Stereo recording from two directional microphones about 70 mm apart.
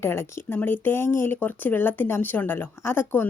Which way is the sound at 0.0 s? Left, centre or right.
Left.